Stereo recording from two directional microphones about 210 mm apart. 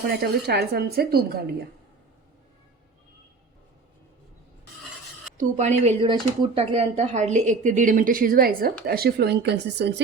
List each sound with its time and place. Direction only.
0.1 s a woman's voice: 50° right (ahead or behind)
5.4 s a woman's voice: 35° right (ahead or behind); by 10.0 s 55° right (ahead or behind)